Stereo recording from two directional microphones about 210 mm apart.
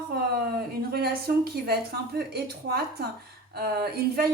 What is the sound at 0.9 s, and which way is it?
Speech, 45° right (ahead or behind).